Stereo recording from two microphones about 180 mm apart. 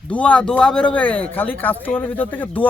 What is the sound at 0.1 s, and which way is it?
Speech, 5° left (ahead or behind).